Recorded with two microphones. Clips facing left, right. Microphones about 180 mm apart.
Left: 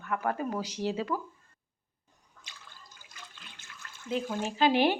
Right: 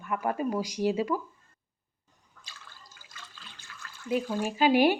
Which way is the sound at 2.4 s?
20° left (ahead or behind).